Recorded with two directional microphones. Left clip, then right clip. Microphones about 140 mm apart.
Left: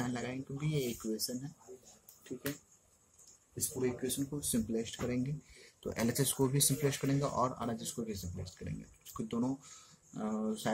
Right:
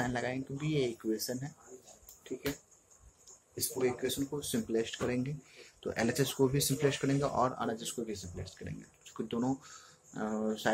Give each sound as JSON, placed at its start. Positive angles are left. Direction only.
{"t": 0.0, "sound": "speech", "side_deg": 10}
{"t": 3.5, "sound": "speech", "side_deg": 15}
{"t": 5.8, "sound": "speech", "side_deg": 30}